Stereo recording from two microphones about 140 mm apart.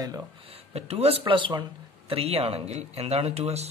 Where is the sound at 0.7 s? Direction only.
45° right (ahead or behind).